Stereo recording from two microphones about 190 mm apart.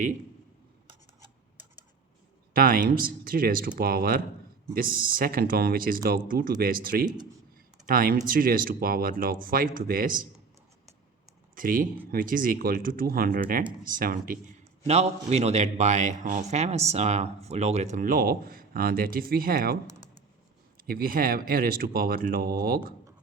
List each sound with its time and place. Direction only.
2.6 s speech: 50° right (ahead or behind)
11.5 s speech: 45° right (ahead or behind)
14.8 s a man's voice: 35° right (ahead or behind); by 23.0 s 50° right (ahead or behind)